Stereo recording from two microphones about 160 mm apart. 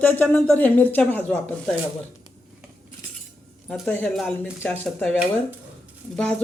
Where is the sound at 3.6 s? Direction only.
Centre (ahead or behind).